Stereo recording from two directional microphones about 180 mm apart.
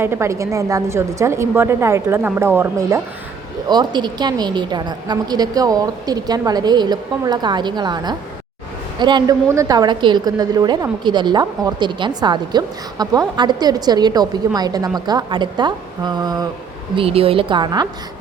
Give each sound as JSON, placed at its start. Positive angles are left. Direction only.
{"t": 0.0, "sound": "a woman's voice", "side_deg": -15}